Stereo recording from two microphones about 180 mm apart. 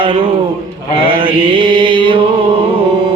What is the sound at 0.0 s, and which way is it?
Speech, 30° right (ahead or behind).